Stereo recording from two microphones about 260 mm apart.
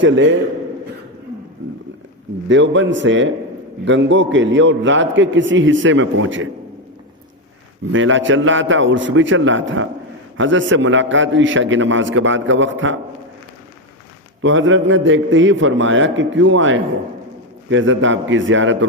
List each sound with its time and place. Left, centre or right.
0.0 s a man's voice: right
2.5 s a man's voice: right
7.9 s a man's voice: right
14.4 s a man's voice: right